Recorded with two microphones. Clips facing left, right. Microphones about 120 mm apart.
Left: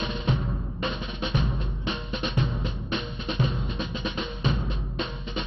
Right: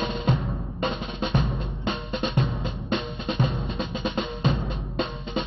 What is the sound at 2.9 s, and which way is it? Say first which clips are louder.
Drum: right 5 dB; 35° right (ahead or behind).